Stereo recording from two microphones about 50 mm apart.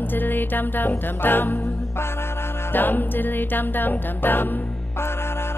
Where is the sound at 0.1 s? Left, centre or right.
Left.